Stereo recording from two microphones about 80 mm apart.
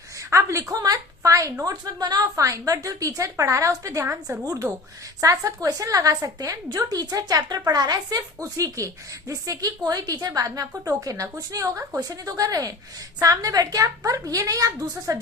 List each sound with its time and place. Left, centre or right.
0.3 s a sound: right
0.7 s a woman's voice: right
1.6 s a woman's voice: right
8.4 s a woman's voice: right